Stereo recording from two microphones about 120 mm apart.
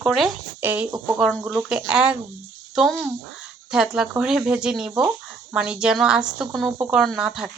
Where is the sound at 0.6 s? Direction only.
15° right (ahead or behind).